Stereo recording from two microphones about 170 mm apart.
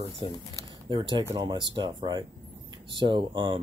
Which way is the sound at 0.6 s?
25° right (ahead or behind).